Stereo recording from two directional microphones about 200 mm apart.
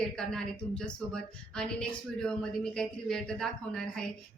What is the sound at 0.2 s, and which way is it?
Speech, 5° left (ahead or behind).